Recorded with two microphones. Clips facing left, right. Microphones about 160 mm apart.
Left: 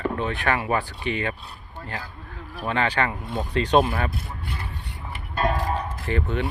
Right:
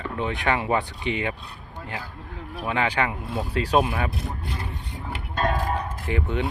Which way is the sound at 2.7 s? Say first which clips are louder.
Left 1 dB; 10° right (ahead or behind).